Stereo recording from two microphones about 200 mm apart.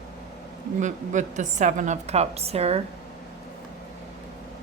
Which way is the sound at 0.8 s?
40° right (ahead or behind).